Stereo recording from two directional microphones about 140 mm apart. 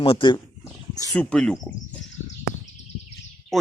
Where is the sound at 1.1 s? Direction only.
10° left (ahead or behind).